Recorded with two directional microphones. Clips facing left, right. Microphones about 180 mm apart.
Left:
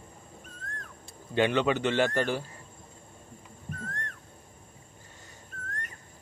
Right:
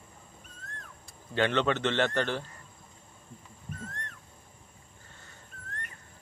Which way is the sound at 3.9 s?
50° left (ahead or behind).